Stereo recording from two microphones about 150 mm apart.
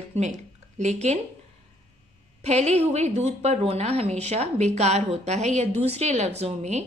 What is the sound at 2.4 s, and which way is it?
A woman's voice, 50° right (ahead or behind).